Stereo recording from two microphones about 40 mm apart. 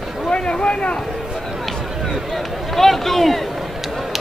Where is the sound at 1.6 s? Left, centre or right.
Centre.